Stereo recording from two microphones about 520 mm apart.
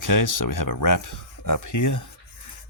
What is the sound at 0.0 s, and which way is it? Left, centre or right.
Speech, left.